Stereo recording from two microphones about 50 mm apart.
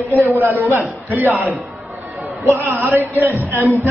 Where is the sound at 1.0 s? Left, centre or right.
Right.